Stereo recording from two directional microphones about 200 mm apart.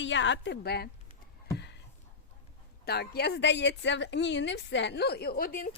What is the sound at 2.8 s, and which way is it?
A woman's voice, 55° left (ahead or behind).